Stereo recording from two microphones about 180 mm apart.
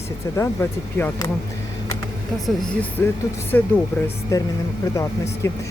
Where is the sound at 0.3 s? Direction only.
10° left (ahead or behind).